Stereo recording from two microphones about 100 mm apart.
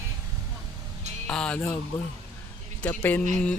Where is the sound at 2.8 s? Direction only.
15° left (ahead or behind).